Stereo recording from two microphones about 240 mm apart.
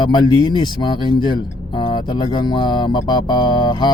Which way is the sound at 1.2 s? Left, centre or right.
Centre.